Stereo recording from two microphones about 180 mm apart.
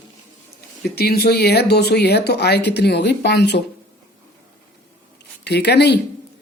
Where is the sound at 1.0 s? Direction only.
60° left (ahead or behind).